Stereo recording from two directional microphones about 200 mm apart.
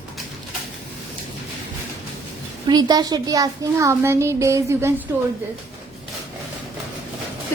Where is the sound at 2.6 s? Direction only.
20° right (ahead or behind).